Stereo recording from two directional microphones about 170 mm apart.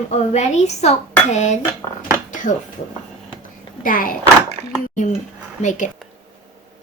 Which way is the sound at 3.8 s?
55° left (ahead or behind).